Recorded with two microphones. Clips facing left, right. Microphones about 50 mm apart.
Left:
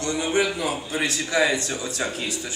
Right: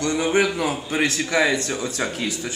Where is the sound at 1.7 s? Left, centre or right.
Right.